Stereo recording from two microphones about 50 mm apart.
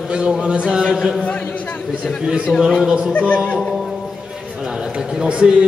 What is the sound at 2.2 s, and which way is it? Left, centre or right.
Speech, centre.